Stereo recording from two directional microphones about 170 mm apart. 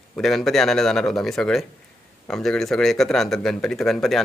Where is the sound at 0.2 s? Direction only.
Centre (ahead or behind).